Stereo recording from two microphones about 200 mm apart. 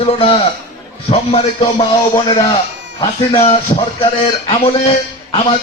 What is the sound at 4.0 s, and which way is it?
A man's voice, 30° left (ahead or behind).